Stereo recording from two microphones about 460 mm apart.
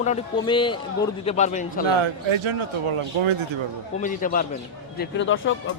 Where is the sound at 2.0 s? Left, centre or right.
Right.